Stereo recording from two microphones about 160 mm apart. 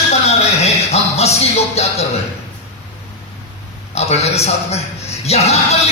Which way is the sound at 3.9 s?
40° left (ahead or behind).